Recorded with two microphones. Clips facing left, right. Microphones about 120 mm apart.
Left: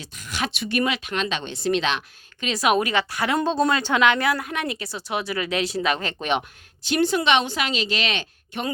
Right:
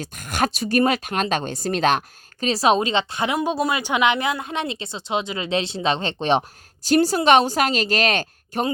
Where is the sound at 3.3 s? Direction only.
10° right (ahead or behind).